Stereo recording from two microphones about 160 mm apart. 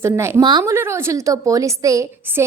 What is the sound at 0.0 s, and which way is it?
A woman's voice, 15° right (ahead or behind).